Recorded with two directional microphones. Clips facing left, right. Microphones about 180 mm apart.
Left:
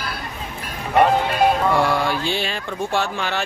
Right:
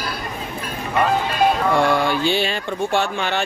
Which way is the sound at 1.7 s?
Centre (ahead or behind).